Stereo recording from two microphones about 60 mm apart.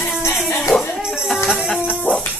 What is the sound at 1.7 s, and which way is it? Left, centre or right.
Dog, centre.